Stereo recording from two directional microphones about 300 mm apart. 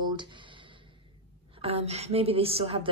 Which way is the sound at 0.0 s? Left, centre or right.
Centre.